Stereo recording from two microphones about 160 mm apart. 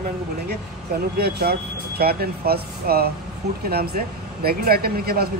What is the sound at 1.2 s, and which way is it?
Speech, 80° right.